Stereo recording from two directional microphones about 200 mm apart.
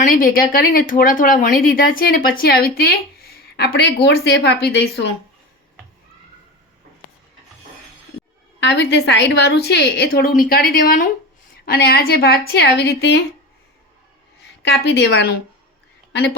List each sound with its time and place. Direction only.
0.0 s a woman's voice: 45° left (ahead or behind)
8.6 s a woman's voice: 60° left (ahead or behind)
14.7 s a woman's voice: 60° left (ahead or behind)